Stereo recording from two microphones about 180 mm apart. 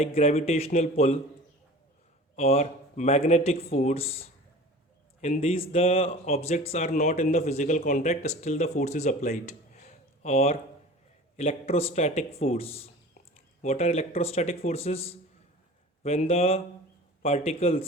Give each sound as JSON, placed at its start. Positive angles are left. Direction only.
{"t": 0.0, "sound": "speech", "side_deg": 35}
{"t": 2.3, "sound": "speech", "side_deg": 35}